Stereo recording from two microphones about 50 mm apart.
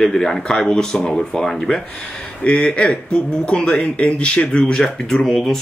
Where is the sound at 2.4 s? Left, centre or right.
Left.